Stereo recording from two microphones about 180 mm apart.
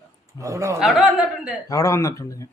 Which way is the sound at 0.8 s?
Centre (ahead or behind).